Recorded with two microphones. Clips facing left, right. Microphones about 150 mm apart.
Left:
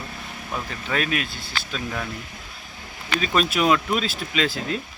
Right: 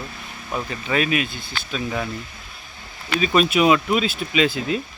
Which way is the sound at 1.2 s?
55° right (ahead or behind).